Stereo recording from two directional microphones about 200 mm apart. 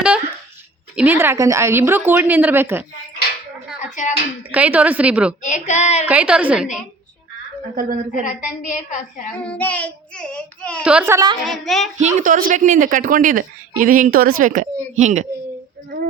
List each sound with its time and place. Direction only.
0.9 s a woman's voice: 10° right (ahead or behind)
3.9 s speech: 40° left (ahead or behind)
4.5 s a woman's voice: 5° right (ahead or behind)
5.4 s a woman's voice: 35° left (ahead or behind)
6.1 s a woman's voice: 5° right (ahead or behind)
7.8 s speech: 45° right (ahead or behind)
8.3 s a woman's voice: 40° left (ahead or behind)
9.4 s child singing: 5° left (ahead or behind)
10.8 s a woman's voice: 10° right (ahead or behind)
11.4 s a woman's voice: centre (ahead or behind)
11.9 s speech: 40° right (ahead or behind)
15.9 s a sound: 50° right (ahead or behind)